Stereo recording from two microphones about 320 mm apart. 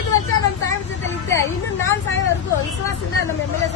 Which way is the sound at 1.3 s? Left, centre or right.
Centre.